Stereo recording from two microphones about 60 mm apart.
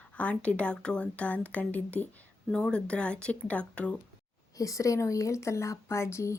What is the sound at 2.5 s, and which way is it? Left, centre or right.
A woman's voice, centre.